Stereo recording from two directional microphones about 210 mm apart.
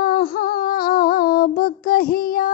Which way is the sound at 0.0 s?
45° left (ahead or behind).